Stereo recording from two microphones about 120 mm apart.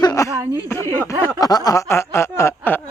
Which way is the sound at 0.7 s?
20° left (ahead or behind).